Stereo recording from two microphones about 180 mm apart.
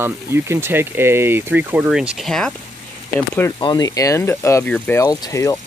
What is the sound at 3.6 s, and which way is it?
Speech, 20° left (ahead or behind).